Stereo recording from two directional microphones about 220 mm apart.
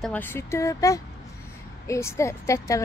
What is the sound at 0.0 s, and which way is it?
Speech, 10° left (ahead or behind).